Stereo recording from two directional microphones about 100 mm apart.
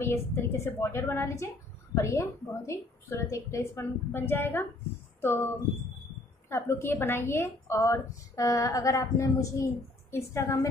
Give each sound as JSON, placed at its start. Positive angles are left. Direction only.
{"t": 0.0, "sound": "a woman's voice", "side_deg": 25}
{"t": 6.5, "sound": "a woman's voice", "side_deg": 25}